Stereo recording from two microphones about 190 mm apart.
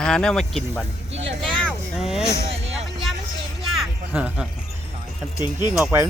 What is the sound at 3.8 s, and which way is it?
Music, 5° right (ahead or behind).